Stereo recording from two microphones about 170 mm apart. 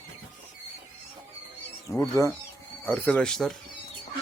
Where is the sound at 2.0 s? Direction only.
15° left (ahead or behind).